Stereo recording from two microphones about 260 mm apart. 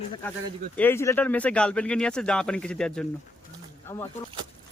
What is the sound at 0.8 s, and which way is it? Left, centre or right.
Speech, centre.